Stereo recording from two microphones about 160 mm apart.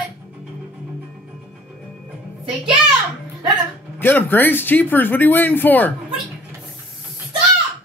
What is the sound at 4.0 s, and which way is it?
Speech, 10° left (ahead or behind).